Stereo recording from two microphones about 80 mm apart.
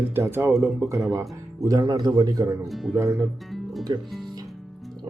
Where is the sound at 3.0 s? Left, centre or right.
Right.